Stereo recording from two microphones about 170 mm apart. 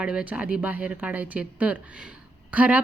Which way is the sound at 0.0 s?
5° right (ahead or behind).